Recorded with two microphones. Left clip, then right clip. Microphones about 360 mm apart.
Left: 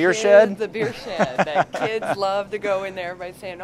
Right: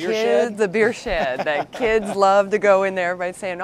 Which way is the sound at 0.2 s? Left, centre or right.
Left.